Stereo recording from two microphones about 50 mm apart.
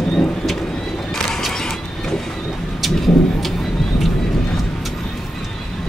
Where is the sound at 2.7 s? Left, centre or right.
Centre.